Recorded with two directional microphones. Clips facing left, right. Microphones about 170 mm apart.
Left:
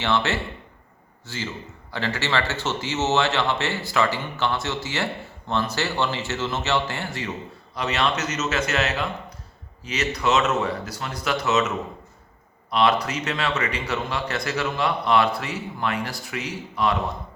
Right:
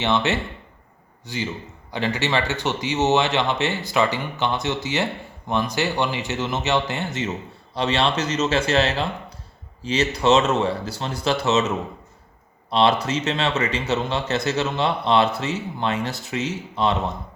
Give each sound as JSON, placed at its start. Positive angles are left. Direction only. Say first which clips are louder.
{"t": 0.0, "sound": "a man's voice", "louder": "right 2 dB", "side_deg": -20}
{"t": 12.7, "sound": "a man's voice", "louder": "right 2 dB", "side_deg": -30}